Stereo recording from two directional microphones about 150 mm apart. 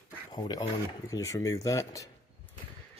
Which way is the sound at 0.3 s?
30° left (ahead or behind).